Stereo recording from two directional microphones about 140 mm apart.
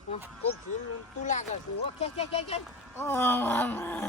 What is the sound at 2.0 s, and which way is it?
Speech, 45° left (ahead or behind).